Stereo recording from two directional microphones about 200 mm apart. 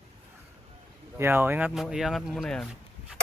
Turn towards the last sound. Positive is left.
turn(degrees=0)  # may be behind; listen again after turning